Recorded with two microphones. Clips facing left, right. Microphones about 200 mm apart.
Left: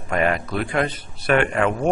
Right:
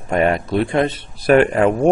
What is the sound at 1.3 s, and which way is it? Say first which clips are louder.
Speech: right 6 dB; 40° right (ahead or behind).